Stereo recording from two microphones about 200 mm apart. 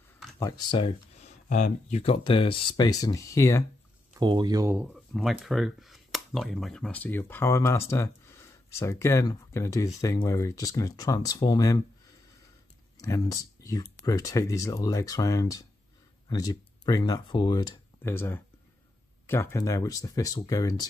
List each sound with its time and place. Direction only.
0.4 s speech: 20° left (ahead or behind)
4.2 s speech: 20° right (ahead or behind)
4.7 s speech: 5° right (ahead or behind); by 11.8 s 20° left (ahead or behind)
13.0 s speech: 15° left (ahead or behind)